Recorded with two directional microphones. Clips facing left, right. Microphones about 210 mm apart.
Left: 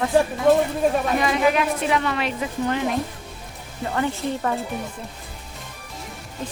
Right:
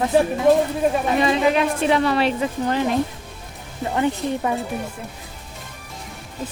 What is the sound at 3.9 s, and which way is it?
Speech, 20° right (ahead or behind).